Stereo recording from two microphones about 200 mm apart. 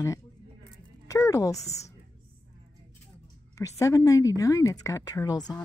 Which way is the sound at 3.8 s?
15° left (ahead or behind).